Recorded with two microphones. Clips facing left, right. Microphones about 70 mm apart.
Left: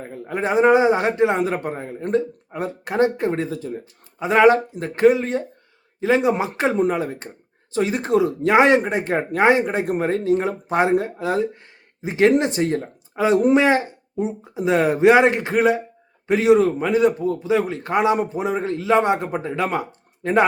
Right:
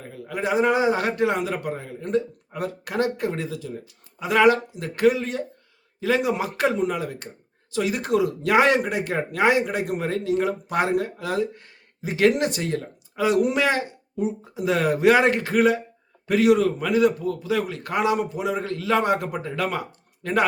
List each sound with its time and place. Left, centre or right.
0.0 s a man's voice: left